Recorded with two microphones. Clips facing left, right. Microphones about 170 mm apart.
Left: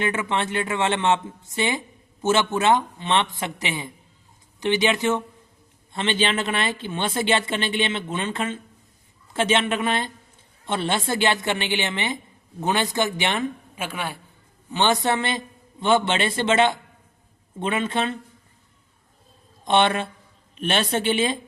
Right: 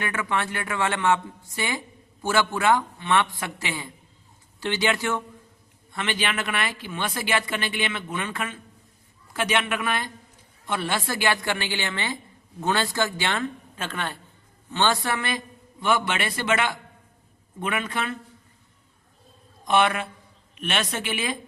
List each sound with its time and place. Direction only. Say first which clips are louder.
0.0 s a woman's voice: left 3 dB; 25° left (ahead or behind)
19.6 s a woman's voice: left 2 dB; 25° left (ahead or behind)